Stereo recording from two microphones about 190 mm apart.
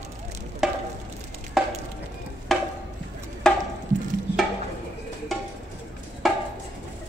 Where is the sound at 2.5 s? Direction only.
Centre (ahead or behind).